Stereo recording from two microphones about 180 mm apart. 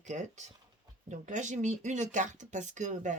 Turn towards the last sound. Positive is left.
turn(degrees=-45)  # may be behind; listen again after turning